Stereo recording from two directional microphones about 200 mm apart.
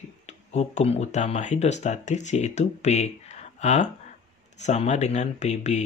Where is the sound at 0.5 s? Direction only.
35° left (ahead or behind).